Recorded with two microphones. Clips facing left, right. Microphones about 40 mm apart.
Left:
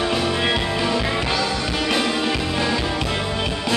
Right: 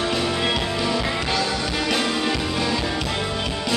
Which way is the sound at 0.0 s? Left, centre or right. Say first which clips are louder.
Left 2 dB; centre.